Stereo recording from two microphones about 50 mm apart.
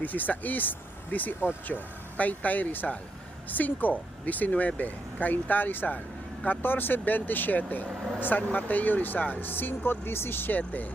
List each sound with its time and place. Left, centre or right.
0.0 s speech: left
9.5 s speech: left
10.6 s speech: left